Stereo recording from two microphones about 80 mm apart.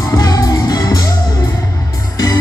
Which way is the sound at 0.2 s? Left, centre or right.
Left.